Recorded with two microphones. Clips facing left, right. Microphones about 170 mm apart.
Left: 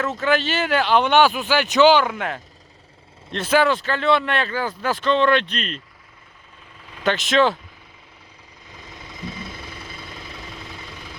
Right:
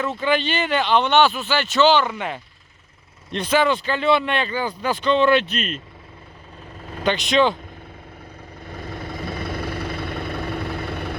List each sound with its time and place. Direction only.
0.0 s speech: 5° left (ahead or behind)
6.7 s vehicle: 45° right (ahead or behind)
7.0 s speech: centre (ahead or behind)
8.6 s vehicle: 55° right (ahead or behind)